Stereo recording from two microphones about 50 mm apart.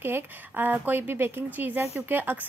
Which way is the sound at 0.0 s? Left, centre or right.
Right.